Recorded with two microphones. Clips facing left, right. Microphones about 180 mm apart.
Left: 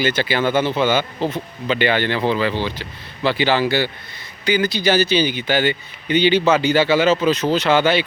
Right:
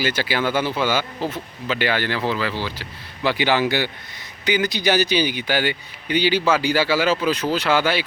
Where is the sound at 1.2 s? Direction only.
25° left (ahead or behind).